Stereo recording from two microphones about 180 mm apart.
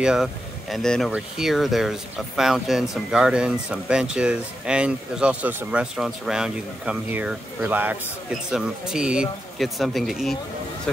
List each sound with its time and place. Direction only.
0.0 s speech: 5° right (ahead or behind)